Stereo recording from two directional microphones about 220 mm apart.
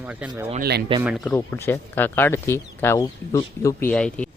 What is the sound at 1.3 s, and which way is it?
Speech, 10° left (ahead or behind).